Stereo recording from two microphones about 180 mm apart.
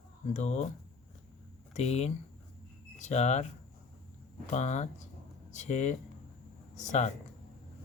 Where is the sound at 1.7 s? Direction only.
35° left (ahead or behind).